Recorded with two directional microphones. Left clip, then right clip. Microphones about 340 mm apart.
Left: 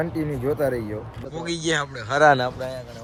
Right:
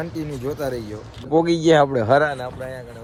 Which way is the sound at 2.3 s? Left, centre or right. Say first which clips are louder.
Left 6 dB; left.